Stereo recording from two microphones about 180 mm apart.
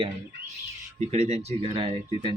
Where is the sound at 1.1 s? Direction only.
35° right (ahead or behind).